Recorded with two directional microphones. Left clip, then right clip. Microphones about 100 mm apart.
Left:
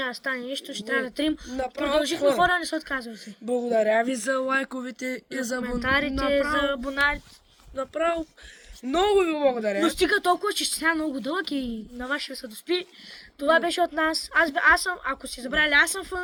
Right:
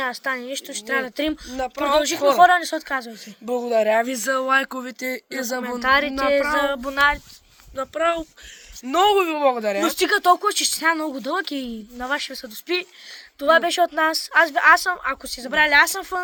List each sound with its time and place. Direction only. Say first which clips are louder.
0.0 s speech: right 4 dB; 35° left (ahead or behind)